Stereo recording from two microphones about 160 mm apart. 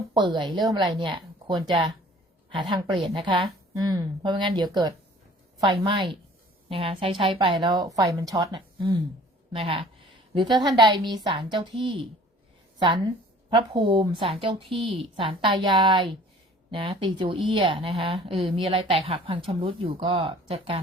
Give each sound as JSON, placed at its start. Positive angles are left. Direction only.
{"t": 0.1, "sound": "a woman's voice", "side_deg": -30}